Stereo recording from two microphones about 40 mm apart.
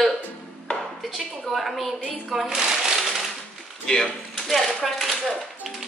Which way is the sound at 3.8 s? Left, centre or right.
Centre.